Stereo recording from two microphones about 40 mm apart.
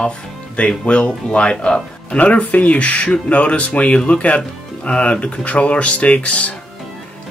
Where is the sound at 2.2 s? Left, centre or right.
Left.